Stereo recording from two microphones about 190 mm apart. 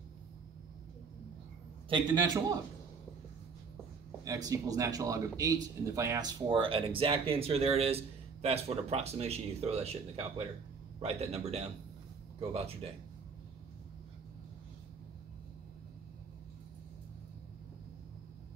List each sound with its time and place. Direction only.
1.9 s speech: 25° right (ahead or behind)
4.5 s a man's voice: 20° right (ahead or behind)